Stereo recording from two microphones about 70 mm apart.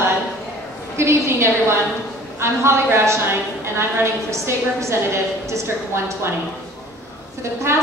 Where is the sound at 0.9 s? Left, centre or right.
Right.